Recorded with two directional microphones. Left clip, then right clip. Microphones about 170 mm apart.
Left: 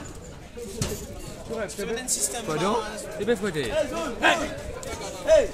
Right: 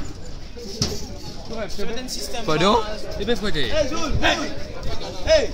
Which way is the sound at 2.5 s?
50° right (ahead or behind).